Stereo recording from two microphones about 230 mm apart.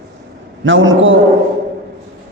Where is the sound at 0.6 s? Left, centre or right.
Right.